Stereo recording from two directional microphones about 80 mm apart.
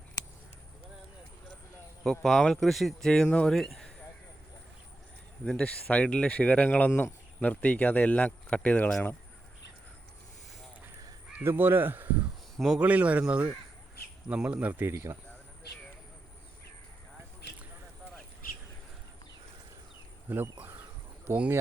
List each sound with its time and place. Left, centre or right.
2.0 s speech: centre
5.5 s speech: centre
11.3 s speech: right
12.5 s speech: centre
12.8 s speech: centre
14.9 s speech: right
20.2 s insect: right
21.2 s speech: centre